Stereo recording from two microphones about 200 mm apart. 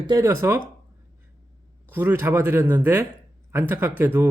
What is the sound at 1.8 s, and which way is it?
Speech, 10° right (ahead or behind).